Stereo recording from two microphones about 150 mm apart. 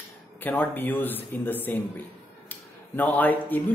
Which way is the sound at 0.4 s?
10° left (ahead or behind).